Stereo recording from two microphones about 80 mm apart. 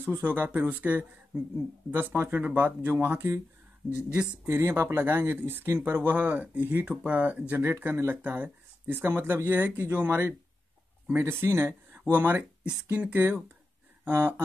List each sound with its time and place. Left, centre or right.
0.2 s speech: right
3.9 s speech: left
4.5 s speech: right
14.0 s speech: right